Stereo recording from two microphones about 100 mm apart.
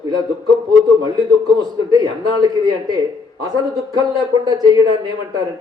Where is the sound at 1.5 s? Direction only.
40° right (ahead or behind).